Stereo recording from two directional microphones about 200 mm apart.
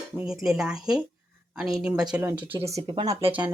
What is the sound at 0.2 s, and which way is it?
Speech, 5° right (ahead or behind).